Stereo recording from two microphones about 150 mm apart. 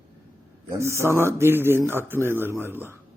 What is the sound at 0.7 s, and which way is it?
Speech, 20° right (ahead or behind).